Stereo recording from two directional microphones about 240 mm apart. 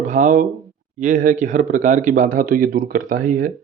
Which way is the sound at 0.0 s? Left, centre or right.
Right.